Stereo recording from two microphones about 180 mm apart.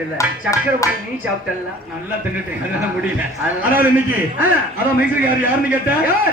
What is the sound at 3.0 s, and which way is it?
A man's voice, 10° right (ahead or behind).